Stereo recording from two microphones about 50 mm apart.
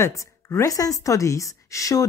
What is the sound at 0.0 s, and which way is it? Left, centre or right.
A woman's voice, left.